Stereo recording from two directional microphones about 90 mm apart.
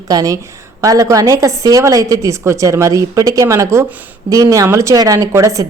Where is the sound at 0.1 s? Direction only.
45° right (ahead or behind).